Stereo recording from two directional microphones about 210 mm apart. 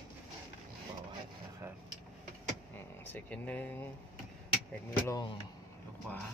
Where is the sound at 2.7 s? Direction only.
10° left (ahead or behind).